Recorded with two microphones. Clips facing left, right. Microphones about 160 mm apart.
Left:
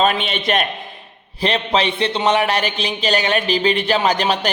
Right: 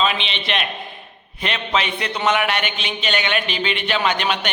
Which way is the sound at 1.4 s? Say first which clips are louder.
Left 5 dB; 35° left (ahead or behind).